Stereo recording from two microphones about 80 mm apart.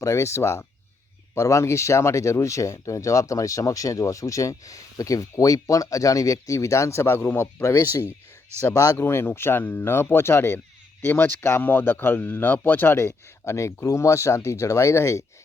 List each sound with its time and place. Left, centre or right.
0.0 s speech: left